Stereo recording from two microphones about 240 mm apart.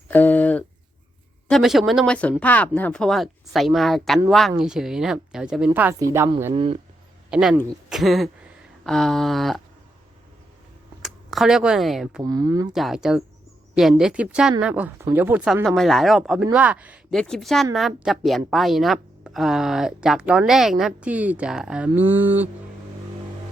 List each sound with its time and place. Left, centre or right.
0.1 s a sound: centre
1.5 s a woman's voice: centre
6.5 s speech: right
7.3 s a woman's voice: centre
11.0 s speech: centre
12.2 s speech: centre
12.7 s a woman's voice: centre